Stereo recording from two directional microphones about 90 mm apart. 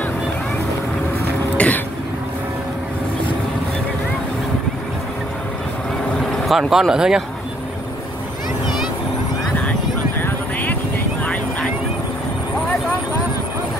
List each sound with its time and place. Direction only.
1.6 s cough: 15° left (ahead or behind)
6.3 s speech: centre (ahead or behind)
10.2 s vehicle: 20° left (ahead or behind)